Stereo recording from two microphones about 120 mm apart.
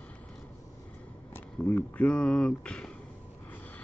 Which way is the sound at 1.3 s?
15° left (ahead or behind).